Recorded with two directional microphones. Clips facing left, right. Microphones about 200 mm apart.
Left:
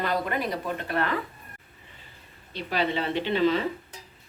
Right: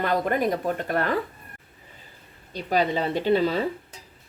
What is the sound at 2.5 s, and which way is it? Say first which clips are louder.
Speech: right 4 dB; 45° right (ahead or behind).